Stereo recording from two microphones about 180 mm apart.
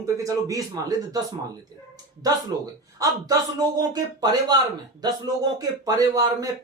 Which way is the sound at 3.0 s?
20° right (ahead or behind).